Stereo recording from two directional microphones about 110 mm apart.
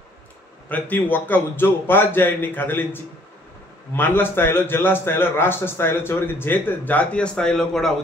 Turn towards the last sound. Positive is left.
turn(degrees=5)  # may be behind; listen again after turning